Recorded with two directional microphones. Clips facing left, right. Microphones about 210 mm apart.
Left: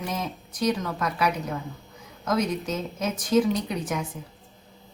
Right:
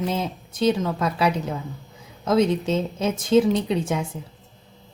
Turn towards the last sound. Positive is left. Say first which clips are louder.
# right 5 dB
turn(degrees=-25)  # may be behind; listen again after turning